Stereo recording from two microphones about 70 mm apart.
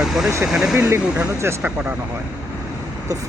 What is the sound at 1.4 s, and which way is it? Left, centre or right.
Speech, right.